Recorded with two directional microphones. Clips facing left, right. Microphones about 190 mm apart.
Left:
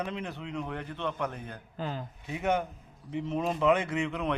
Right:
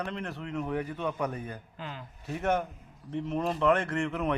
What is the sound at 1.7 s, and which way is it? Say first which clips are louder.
Speech: left 11 dB; 40° left (ahead or behind).